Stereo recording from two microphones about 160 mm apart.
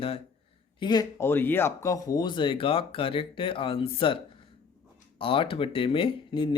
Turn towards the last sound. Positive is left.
turn(degrees=30)  # may be behind; listen again after turning